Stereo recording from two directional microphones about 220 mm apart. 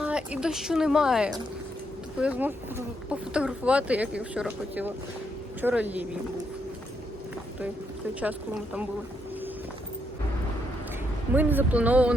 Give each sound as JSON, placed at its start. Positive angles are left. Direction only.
{"t": 0.0, "sound": "a woman's voice", "side_deg": -5}
{"t": 8.2, "sound": "speech", "side_deg": -5}
{"t": 11.3, "sound": "speech", "side_deg": -10}